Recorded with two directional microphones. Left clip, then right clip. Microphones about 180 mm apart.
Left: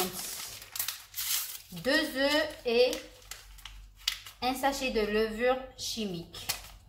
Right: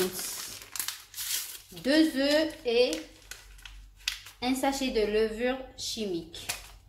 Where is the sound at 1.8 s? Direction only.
45° right (ahead or behind).